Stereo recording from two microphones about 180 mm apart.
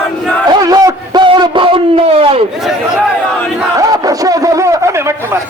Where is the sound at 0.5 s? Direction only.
20° right (ahead or behind).